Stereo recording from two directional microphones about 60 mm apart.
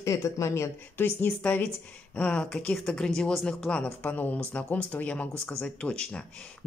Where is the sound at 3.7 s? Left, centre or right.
Left.